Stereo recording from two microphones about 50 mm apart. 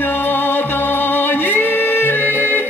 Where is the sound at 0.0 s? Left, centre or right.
Left.